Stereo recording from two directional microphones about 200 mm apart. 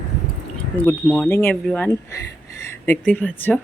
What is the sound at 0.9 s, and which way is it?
Speech, 10° left (ahead or behind).